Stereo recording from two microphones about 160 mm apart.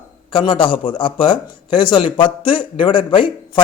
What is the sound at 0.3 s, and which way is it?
Speech, 30° left (ahead or behind).